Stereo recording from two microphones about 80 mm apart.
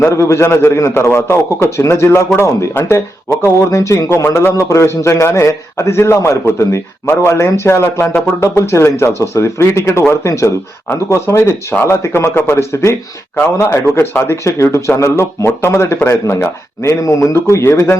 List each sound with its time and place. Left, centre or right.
0.1 s a man's voice: left